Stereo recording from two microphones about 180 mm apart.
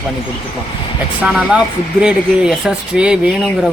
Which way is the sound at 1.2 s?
5° right (ahead or behind).